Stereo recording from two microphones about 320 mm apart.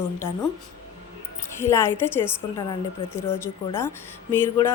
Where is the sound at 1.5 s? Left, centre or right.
Centre.